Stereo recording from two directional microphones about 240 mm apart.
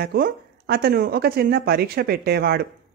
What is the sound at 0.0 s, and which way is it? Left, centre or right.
Speech, right.